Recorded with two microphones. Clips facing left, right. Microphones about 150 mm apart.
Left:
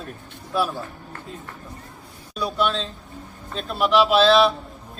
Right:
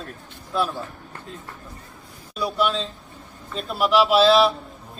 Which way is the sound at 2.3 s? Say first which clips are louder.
Even; 5° right (ahead or behind).